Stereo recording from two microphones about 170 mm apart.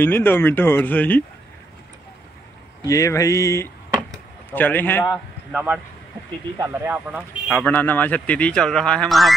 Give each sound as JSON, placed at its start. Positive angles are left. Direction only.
{"t": 0.0, "sound": "speech", "side_deg": 10}
{"t": 2.8, "sound": "speech", "side_deg": 20}
{"t": 5.5, "sound": "speech", "side_deg": -5}
{"t": 7.5, "sound": "speech", "side_deg": 10}